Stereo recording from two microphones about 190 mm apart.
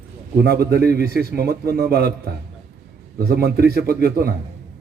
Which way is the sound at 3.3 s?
55° right (ahead or behind).